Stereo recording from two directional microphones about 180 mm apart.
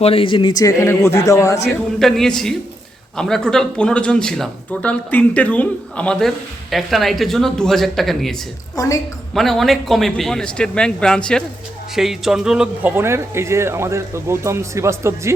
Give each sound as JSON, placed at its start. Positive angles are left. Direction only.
{"t": 0.0, "sound": "speech", "side_deg": 30}
{"t": 2.0, "sound": "speech", "side_deg": 0}
{"t": 8.7, "sound": "a woman's voice", "side_deg": 20}
{"t": 9.3, "sound": "speech", "side_deg": 0}